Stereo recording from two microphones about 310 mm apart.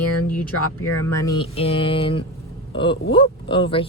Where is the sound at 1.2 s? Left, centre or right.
Centre.